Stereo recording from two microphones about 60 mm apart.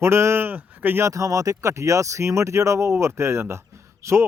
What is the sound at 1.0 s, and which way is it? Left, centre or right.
Speech, right.